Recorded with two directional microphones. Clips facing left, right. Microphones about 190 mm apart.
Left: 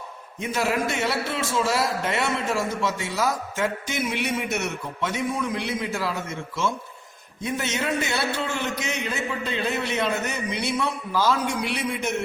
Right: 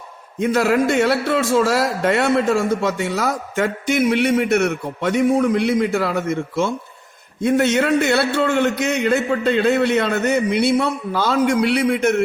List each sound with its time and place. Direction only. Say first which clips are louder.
0.4 s a man's voice: right 8 dB; 65° right (ahead or behind)